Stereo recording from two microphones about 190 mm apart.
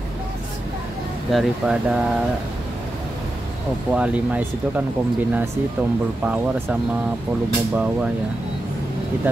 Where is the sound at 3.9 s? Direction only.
5° right (ahead or behind).